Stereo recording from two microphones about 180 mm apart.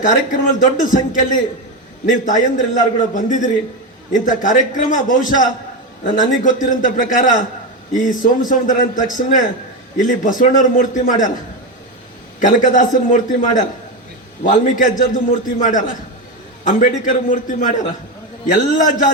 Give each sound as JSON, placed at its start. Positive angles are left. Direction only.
{"t": 0.0, "sound": "a man's voice", "side_deg": 45}
{"t": 12.4, "sound": "a man's voice", "side_deg": 45}